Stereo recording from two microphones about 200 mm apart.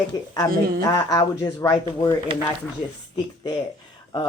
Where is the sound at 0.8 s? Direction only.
20° left (ahead or behind).